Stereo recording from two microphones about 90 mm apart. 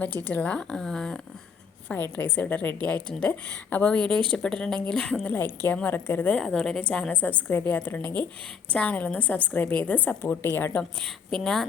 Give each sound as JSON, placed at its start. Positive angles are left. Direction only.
{"t": 0.3, "sound": "a woman's voice", "side_deg": 15}
{"t": 1.9, "sound": "a woman's voice", "side_deg": 20}
{"t": 5.3, "sound": "a woman's voice", "side_deg": 20}
{"t": 6.4, "sound": "a woman's voice", "side_deg": 5}
{"t": 11.0, "sound": "a woman's voice", "side_deg": 5}